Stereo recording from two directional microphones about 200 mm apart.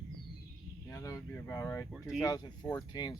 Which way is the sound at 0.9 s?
15° left (ahead or behind).